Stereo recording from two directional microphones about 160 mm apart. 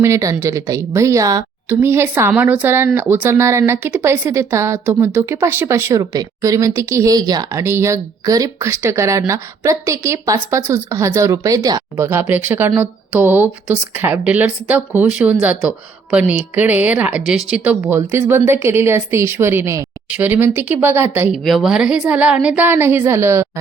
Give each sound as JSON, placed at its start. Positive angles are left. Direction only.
{"t": 0.0, "sound": "a woman's voice", "side_deg": -20}
{"t": 21.3, "sound": "speech", "side_deg": 0}